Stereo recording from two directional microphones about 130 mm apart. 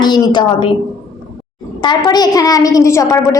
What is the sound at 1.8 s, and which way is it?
A woman's voice, 30° left (ahead or behind).